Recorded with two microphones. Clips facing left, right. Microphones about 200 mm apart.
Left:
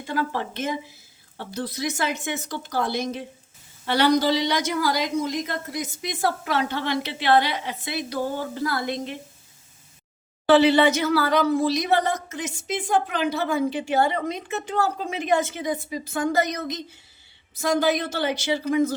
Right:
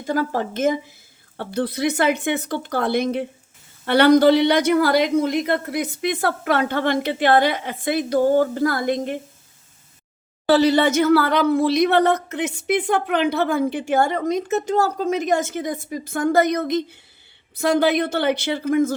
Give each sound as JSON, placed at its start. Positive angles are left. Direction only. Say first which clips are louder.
{"t": 0.0, "sound": "speech", "louder": "right 5 dB", "side_deg": -45}
{"t": 1.4, "sound": "a woman's voice", "louder": "right 7 dB", "side_deg": -60}
{"t": 10.5, "sound": "a woman's voice", "louder": "right 1 dB", "side_deg": -40}